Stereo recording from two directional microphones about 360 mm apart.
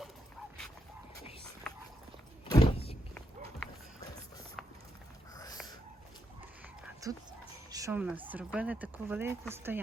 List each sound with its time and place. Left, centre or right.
2.5 s vehicle: centre
3.2 s a sound: centre
4.6 s clip-clop: centre
6.8 s whispering: centre
7.7 s a woman's voice: centre